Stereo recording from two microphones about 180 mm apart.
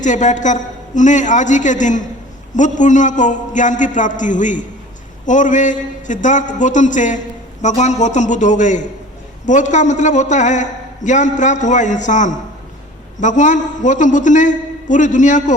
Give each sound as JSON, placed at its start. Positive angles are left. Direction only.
{"t": 0.0, "sound": "a man's voice", "side_deg": 45}